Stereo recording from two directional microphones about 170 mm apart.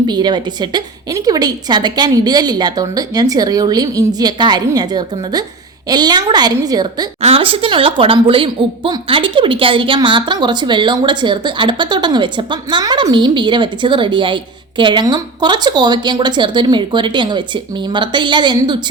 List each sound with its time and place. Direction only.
0.1 s a woman's voice: 25° right (ahead or behind)
7.2 s a woman's voice: 35° right (ahead or behind)